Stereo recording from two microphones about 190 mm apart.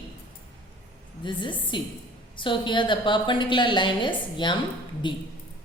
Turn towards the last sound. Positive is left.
turn(degrees=25)  # may be behind; listen again after turning